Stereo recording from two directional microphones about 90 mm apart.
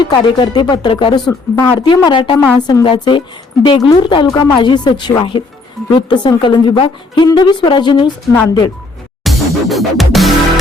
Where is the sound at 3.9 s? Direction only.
55° left (ahead or behind).